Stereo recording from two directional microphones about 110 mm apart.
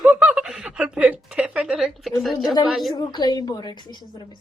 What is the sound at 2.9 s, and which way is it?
A woman's voice, 40° left (ahead or behind).